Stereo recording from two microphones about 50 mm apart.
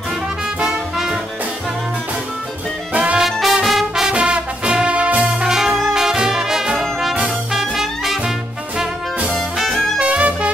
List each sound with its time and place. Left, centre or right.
0.6 s music: centre
2.9 s music: right
3.2 s music: centre
4.0 s music: centre
5.5 s music: centre
6.8 s brass instrument: centre
7.5 s music: centre
9.3 s music: centre
9.9 s music: right